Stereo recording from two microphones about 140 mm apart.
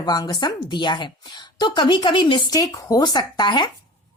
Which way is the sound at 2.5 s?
25° left (ahead or behind).